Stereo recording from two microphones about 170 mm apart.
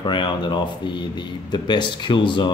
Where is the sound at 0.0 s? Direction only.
25° left (ahead or behind).